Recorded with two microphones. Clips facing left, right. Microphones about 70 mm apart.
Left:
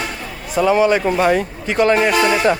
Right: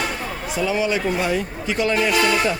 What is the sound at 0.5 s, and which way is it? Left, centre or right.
Speech, left.